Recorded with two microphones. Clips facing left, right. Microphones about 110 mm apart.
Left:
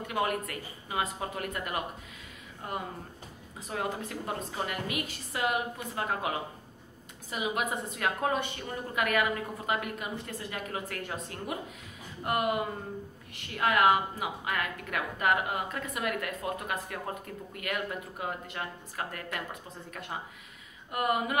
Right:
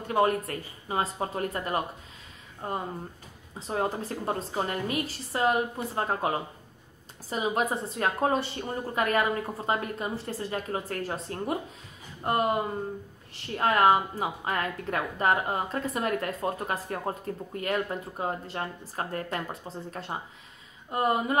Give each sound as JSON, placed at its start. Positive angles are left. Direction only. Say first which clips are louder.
{"t": 0.0, "sound": "a woman's voice", "louder": "right 6 dB", "side_deg": -35}